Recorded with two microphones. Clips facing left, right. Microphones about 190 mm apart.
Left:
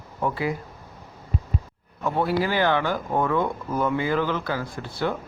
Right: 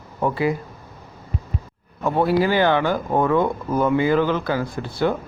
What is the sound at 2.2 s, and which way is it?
Speech, 25° right (ahead or behind).